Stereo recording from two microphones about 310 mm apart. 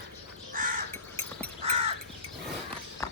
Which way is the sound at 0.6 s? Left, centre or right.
Right.